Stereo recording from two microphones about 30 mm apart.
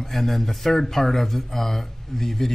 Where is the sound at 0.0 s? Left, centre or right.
Centre.